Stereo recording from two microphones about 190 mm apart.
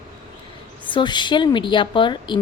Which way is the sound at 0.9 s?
25° left (ahead or behind).